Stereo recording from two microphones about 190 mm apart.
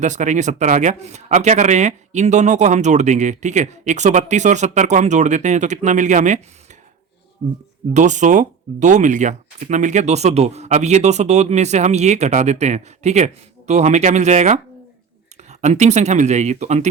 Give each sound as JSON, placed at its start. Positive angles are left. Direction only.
{"t": 0.0, "sound": "speech", "side_deg": -40}
{"t": 7.9, "sound": "speech", "side_deg": -40}